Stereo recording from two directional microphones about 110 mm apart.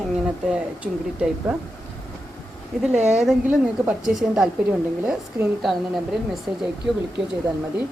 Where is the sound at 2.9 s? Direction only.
90° right.